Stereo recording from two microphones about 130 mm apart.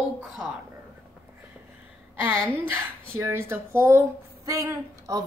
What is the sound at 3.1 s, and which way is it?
A woman's voice, 20° right (ahead or behind).